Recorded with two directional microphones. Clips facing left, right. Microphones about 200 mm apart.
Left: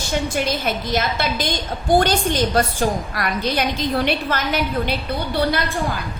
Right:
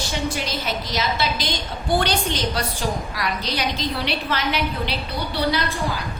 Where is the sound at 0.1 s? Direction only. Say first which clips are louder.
Left 7 dB; 50° left (ahead or behind).